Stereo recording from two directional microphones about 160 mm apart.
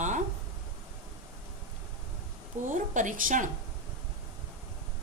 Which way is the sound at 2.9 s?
50° right (ahead or behind).